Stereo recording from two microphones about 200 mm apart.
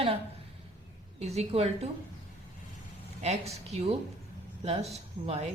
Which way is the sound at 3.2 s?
30° right (ahead or behind).